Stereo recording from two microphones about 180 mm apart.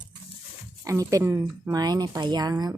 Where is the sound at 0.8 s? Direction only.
20° right (ahead or behind).